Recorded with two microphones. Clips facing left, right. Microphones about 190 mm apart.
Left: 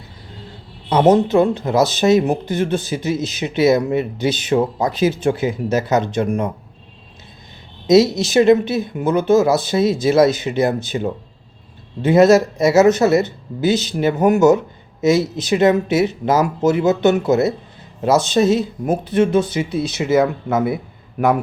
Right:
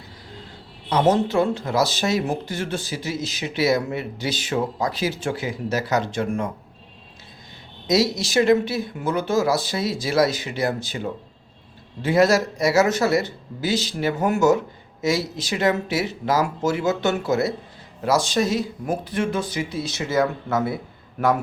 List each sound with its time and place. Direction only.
0.9 s speech: 20° left (ahead or behind)
7.9 s speech: 20° left (ahead or behind)